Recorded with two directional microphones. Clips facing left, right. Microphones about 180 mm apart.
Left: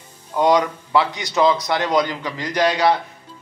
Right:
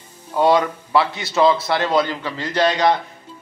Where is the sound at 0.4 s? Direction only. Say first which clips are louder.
Right 1 dB; 15° left (ahead or behind).